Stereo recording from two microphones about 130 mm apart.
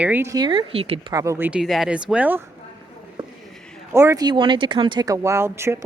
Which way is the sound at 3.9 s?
25° right (ahead or behind).